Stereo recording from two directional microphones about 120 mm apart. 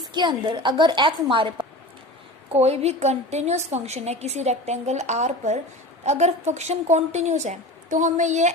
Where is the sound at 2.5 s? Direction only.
60° right (ahead or behind).